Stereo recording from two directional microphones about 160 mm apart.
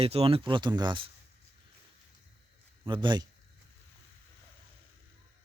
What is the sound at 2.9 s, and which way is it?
Speech, 30° right (ahead or behind).